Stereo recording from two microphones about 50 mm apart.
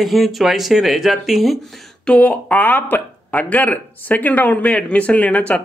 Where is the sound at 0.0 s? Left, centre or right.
Centre.